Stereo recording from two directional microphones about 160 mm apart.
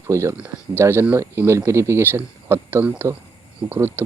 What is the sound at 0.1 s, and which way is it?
Speech, 15° right (ahead or behind).